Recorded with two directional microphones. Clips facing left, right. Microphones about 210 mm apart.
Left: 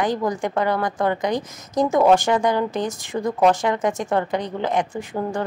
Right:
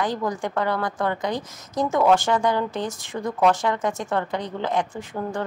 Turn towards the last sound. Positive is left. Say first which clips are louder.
# left 3 dB
turn(degrees=15)  # may be behind; listen again after turning